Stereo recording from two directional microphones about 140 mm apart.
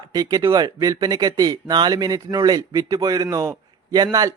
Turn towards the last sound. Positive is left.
turn(degrees=-25)  # may be behind; listen again after turning